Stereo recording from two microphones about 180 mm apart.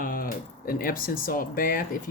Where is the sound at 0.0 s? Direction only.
55° left (ahead or behind).